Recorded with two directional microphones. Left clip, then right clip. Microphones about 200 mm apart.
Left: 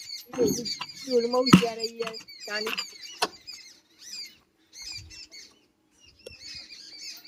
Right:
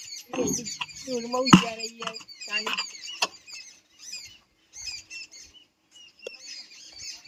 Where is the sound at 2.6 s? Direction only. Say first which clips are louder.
Right 2 dB; 20° right (ahead or behind).